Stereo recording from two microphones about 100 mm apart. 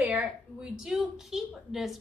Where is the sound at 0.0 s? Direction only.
15° right (ahead or behind).